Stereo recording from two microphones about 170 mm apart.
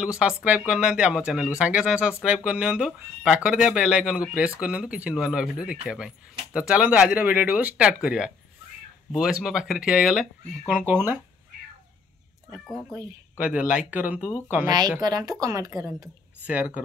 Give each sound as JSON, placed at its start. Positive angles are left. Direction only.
{"t": 0.0, "sound": "speech", "side_deg": -5}
{"t": 12.5, "sound": "speech", "side_deg": 0}
{"t": 14.7, "sound": "speech", "side_deg": -25}
{"t": 16.4, "sound": "speech", "side_deg": -10}